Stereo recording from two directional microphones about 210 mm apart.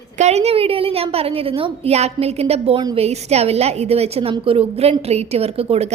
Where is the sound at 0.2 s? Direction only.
30° right (ahead or behind).